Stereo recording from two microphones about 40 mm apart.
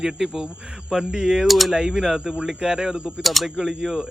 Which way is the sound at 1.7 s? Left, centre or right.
Centre.